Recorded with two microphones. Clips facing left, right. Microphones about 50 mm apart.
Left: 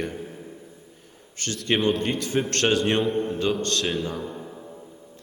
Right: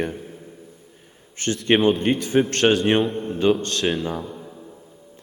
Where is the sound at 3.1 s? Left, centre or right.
Left.